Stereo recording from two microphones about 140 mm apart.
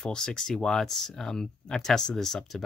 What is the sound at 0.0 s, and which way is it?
Speech, 5° left (ahead or behind).